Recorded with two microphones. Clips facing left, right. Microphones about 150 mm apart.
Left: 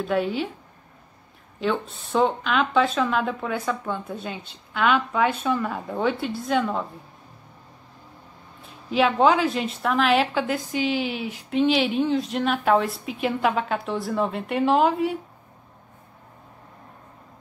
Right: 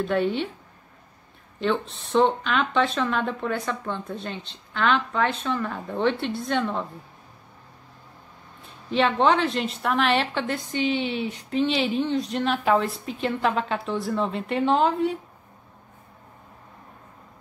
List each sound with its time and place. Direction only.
0.0 s a woman's voice: centre (ahead or behind)
1.6 s a woman's voice: 5° left (ahead or behind)
8.9 s a woman's voice: 5° left (ahead or behind)